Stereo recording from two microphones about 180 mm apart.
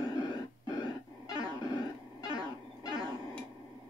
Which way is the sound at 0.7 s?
20° left (ahead or behind).